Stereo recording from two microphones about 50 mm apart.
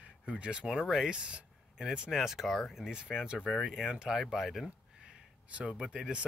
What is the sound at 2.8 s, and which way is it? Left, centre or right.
Speech, centre.